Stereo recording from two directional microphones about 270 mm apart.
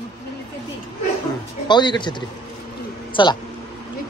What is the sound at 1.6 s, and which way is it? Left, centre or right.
A man's voice, centre.